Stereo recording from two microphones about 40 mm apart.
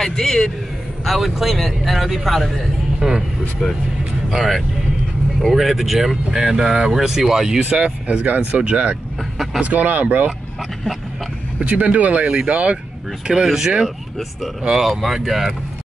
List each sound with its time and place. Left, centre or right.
0.0 s a man's voice: centre
1.0 s speech: centre
3.0 s speech: centre
4.4 s speech: centre
7.8 s speech: right
11.7 s speech: right
13.3 s speech: centre
14.7 s speech: centre